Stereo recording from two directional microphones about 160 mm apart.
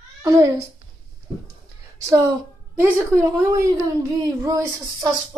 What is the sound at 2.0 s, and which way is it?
A woman's voice, 20° right (ahead or behind).